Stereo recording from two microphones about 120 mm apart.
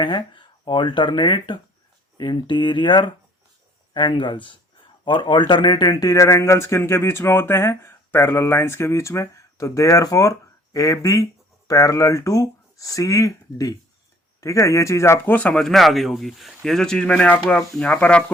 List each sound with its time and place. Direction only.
0.0 s speech: 40° left (ahead or behind); by 18.2 s 10° left (ahead or behind)